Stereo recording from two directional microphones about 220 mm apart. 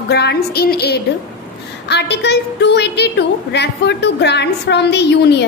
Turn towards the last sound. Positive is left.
turn(degrees=50)  # may be behind; listen again after turning